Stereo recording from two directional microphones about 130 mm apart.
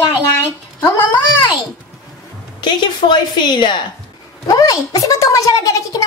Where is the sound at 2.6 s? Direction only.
35° left (ahead or behind).